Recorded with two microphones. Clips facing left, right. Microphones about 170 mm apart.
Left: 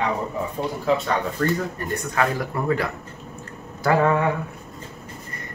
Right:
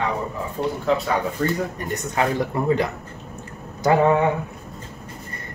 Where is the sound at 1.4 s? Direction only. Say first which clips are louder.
Even; 20° right (ahead or behind).